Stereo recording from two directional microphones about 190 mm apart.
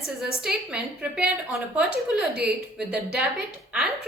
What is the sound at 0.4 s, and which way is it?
A woman's voice, 5° right (ahead or behind).